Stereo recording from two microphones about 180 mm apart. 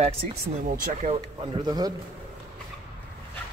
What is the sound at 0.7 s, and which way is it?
Speech, 45° right (ahead or behind).